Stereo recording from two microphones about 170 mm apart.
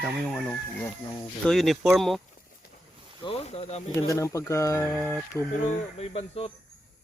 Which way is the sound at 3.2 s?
35° left (ahead or behind).